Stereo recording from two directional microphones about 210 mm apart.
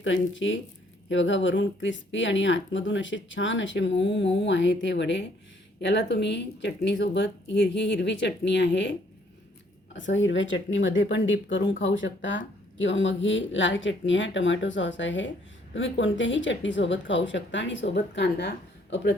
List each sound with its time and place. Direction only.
0.0 s speech: 65° left (ahead or behind)